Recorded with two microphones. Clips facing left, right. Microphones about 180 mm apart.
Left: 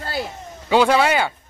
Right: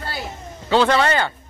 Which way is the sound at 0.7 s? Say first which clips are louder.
Left 1 dB; 10° left (ahead or behind).